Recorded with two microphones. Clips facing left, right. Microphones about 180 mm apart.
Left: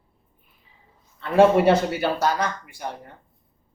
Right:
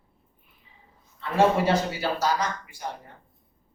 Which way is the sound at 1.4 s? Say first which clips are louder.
Left 6 dB; 60° left (ahead or behind).